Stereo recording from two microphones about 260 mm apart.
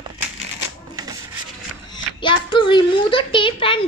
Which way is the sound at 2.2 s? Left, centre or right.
Centre.